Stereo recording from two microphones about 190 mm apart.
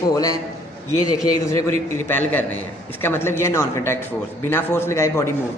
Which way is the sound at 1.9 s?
10° left (ahead or behind).